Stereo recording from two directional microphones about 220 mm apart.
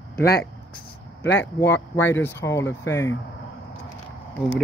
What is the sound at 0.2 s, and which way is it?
Speech, 45° left (ahead or behind).